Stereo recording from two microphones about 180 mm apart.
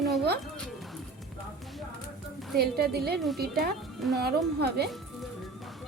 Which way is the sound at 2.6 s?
60° right (ahead or behind).